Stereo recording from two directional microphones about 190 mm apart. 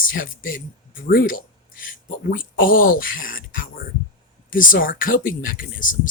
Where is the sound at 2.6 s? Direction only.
50° left (ahead or behind).